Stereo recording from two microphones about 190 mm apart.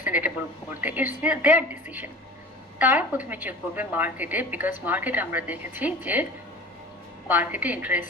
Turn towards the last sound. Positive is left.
turn(degrees=-10)  # may be behind; listen again after turning